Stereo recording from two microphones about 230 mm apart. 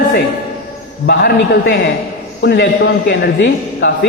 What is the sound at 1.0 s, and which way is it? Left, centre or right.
A man's voice, left.